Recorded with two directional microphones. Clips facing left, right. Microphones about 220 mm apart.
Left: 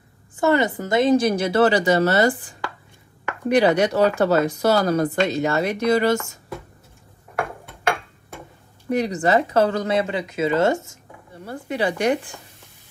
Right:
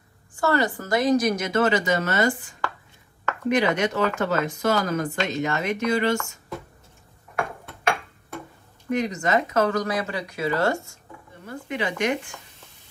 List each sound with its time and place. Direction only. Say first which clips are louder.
0.4 s speech: left 4 dB; 20° left (ahead or behind); by 6.1 s 40° left (ahead or behind)
8.9 s speech: left 4 dB; 35° left (ahead or behind)
11.4 s speech: left 5 dB; 35° left (ahead or behind)